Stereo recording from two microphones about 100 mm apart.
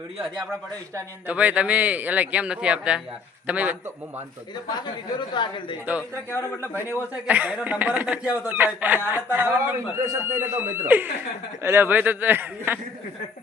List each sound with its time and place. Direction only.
1.3 s speech: 15° right (ahead or behind)
5.3 s speech: 50° left (ahead or behind)
6.0 s a man's voice: 25° left (ahead or behind)
7.3 s a man's voice: 15° right (ahead or behind)